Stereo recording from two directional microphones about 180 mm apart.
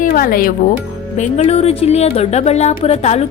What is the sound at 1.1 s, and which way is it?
Speech, 35° left (ahead or behind).